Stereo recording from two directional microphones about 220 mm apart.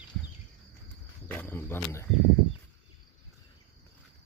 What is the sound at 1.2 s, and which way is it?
Cricket, 10° left (ahead or behind).